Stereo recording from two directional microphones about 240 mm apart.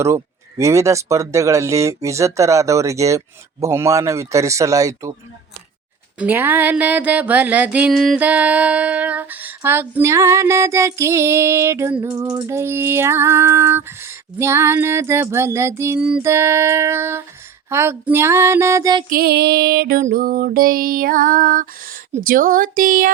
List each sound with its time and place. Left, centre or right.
0.6 s mantra: centre
6.1 s mantra: centre
19.1 s music: right